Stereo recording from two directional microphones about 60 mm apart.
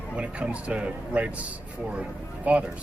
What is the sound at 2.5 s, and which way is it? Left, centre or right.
Speech, right.